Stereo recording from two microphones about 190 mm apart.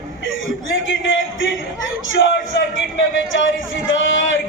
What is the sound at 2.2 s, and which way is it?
Speech, 65° left (ahead or behind).